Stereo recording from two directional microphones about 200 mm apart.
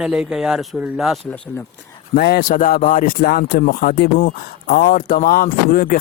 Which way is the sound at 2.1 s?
50° left (ahead or behind).